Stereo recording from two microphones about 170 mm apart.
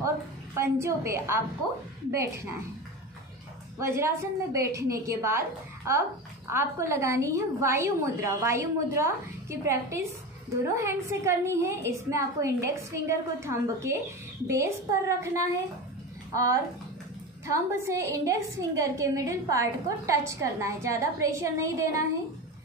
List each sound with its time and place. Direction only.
0.6 s a woman's voice: 15° right (ahead or behind)
3.8 s a woman's voice: 15° right (ahead or behind)
6.5 s a woman's voice: 15° right (ahead or behind)
17.5 s a woman's voice: 20° right (ahead or behind)